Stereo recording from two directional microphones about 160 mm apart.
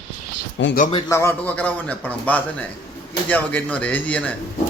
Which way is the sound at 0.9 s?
30° left (ahead or behind).